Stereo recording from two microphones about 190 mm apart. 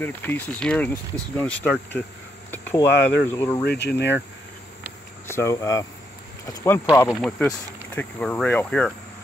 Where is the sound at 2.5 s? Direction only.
10° left (ahead or behind).